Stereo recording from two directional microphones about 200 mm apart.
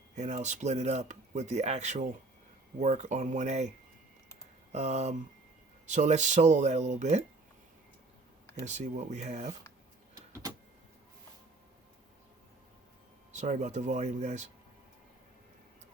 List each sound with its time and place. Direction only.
0.2 s speech: 35° right (ahead or behind)
4.7 s speech: 35° right (ahead or behind)
8.6 s speech: 35° right (ahead or behind)
13.3 s speech: 35° right (ahead or behind)